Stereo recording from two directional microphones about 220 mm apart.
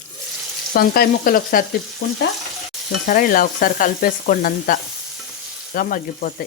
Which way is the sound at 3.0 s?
40° left (ahead or behind).